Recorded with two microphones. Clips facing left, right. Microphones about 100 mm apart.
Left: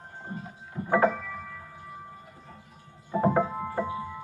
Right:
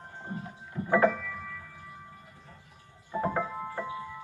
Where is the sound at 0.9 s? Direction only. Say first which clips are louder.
Left 1 dB; 25° left (ahead or behind).